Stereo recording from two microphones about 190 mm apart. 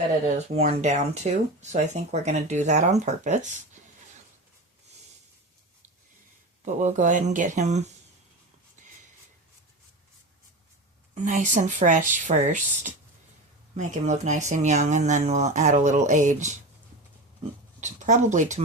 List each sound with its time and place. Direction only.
0.3 s speech: 35° right (ahead or behind)
6.7 s speech: 40° right (ahead or behind)
11.1 s speech: 40° right (ahead or behind)
17.7 s speech: 40° right (ahead or behind)